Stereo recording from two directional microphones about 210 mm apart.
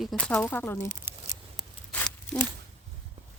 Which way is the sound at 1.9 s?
5° left (ahead or behind).